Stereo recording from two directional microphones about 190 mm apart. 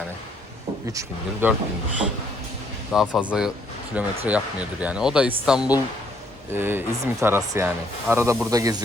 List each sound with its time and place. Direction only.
0.9 s speech: 15° right (ahead or behind)
2.9 s speech: centre (ahead or behind); by 8.8 s 20° right (ahead or behind)